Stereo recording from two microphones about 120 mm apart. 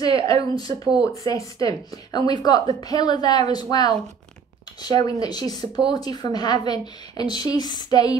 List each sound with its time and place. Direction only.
0.0 s speech: 30° left (ahead or behind)